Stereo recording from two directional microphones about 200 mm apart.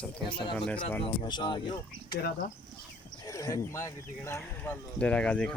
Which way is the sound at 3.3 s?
15° left (ahead or behind).